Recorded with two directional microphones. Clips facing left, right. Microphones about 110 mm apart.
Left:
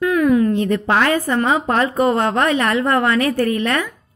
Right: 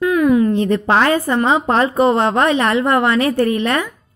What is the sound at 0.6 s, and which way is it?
A woman's voice, 30° right (ahead or behind).